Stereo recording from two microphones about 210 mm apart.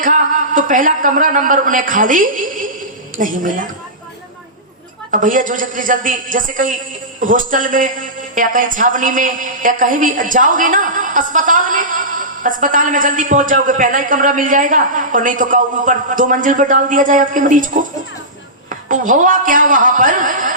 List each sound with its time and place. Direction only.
0.0 s a man's voice: 40° right (ahead or behind)
5.1 s a woman's voice: 40° right (ahead or behind)
18.7 s a woman's voice: 40° right (ahead or behind)